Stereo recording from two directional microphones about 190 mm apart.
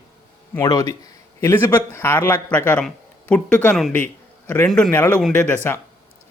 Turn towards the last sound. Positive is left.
turn(degrees=10)  # may be behind; listen again after turning